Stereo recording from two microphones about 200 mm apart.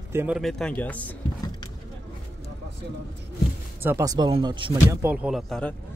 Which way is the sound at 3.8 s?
15° right (ahead or behind).